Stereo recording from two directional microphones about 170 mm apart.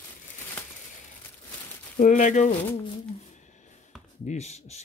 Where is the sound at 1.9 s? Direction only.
50° left (ahead or behind).